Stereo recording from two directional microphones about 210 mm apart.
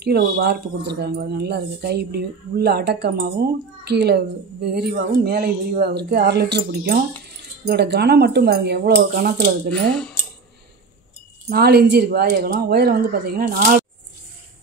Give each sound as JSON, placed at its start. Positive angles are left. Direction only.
{"t": 0.0, "sound": "speech", "side_deg": -50}
{"t": 9.7, "sound": "speech", "side_deg": 5}
{"t": 11.4, "sound": "speech", "side_deg": -50}